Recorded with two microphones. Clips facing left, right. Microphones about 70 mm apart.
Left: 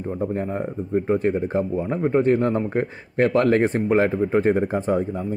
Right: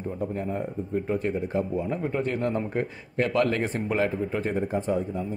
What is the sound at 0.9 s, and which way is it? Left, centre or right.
A man's voice, left.